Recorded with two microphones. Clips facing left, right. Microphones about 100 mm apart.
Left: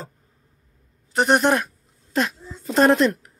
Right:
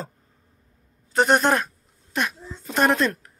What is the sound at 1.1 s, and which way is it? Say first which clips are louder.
Speech: left 1 dB; 15° left (ahead or behind).